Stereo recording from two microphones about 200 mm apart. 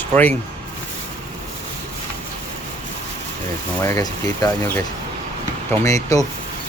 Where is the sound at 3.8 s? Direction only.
15° left (ahead or behind).